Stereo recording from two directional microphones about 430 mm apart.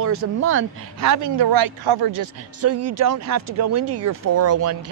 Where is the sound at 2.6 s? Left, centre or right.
Right.